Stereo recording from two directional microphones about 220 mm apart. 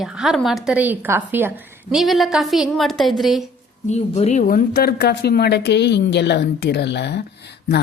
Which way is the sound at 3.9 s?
30° left (ahead or behind).